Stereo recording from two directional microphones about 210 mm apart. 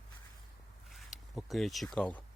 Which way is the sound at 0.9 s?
Centre (ahead or behind).